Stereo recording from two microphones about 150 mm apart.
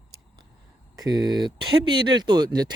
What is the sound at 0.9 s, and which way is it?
Speech, 25° right (ahead or behind).